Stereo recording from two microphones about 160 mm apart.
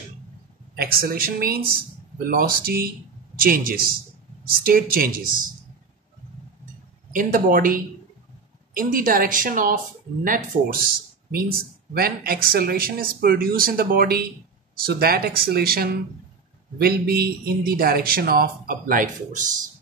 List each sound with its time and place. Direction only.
0.7 s a woman's voice: 70° right (ahead or behind)
7.1 s a woman's voice: 60° right (ahead or behind)
11.3 s speech: 70° right (ahead or behind); by 19.4 s 55° right (ahead or behind)